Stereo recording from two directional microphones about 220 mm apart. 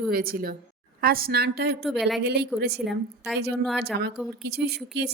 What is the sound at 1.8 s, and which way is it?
Speech, centre (ahead or behind).